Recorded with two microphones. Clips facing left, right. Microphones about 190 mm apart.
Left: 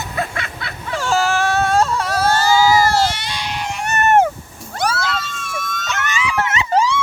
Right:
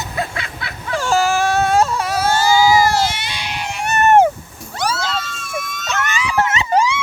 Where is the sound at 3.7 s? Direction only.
15° right (ahead or behind).